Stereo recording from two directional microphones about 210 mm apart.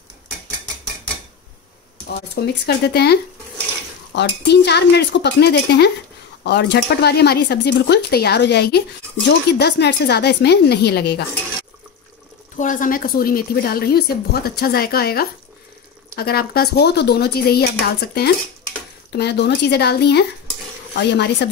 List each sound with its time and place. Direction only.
2.4 s a woman's voice: 50° left (ahead or behind)
12.5 s a woman's voice: 40° left (ahead or behind)